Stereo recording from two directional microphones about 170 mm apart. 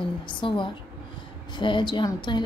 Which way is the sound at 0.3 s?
30° left (ahead or behind).